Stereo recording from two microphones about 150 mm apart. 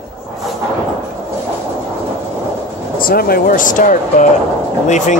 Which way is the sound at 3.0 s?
80° left.